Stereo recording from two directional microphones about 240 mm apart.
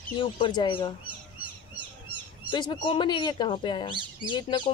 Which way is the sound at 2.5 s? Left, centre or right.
Centre.